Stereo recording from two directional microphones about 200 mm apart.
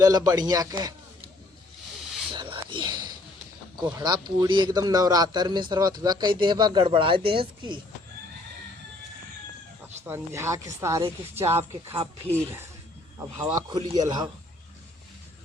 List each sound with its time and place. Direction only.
0.0 s speech: 20° right (ahead or behind)
2.3 s a sound: 25° right (ahead or behind)
3.8 s speech: 20° right (ahead or behind)
10.1 s speech: 15° right (ahead or behind)
13.1 s speech: 15° right (ahead or behind)